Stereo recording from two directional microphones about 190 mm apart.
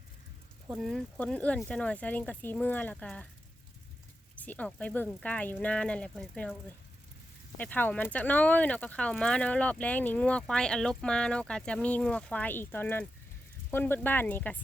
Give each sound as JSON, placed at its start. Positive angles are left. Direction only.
{"t": 0.7, "sound": "speech", "side_deg": 0}
{"t": 4.4, "sound": "speech", "side_deg": 10}
{"t": 7.6, "sound": "speech", "side_deg": 10}